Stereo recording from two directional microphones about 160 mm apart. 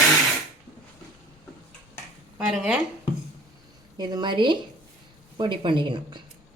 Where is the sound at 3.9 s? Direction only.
25° right (ahead or behind).